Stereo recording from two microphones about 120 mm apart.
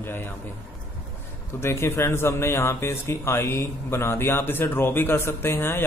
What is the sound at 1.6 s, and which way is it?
Speech, 20° left (ahead or behind).